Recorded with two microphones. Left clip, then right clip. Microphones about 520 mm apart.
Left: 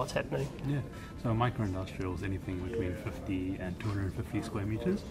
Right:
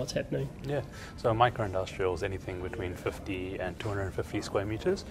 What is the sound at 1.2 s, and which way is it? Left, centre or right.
Speech, right.